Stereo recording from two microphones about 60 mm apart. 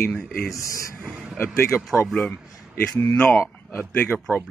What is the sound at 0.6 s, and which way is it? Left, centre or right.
Speech, left.